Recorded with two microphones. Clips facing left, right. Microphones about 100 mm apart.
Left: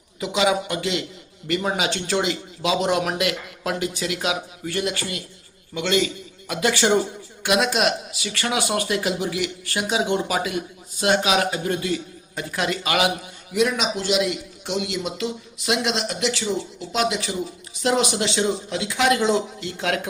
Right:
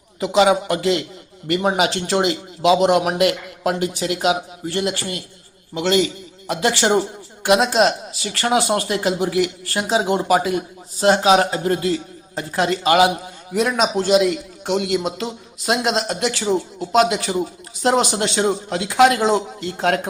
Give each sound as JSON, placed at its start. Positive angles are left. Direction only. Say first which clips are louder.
{"t": 0.2, "sound": "speech", "louder": "right 6 dB", "side_deg": -35}
{"t": 13.5, "sound": "a man's voice", "louder": "right 3 dB", "side_deg": -45}
{"t": 17.8, "sound": "speech", "louder": "right 3 dB", "side_deg": -40}
{"t": 18.2, "sound": "a man's voice", "louder": "right 3 dB", "side_deg": -50}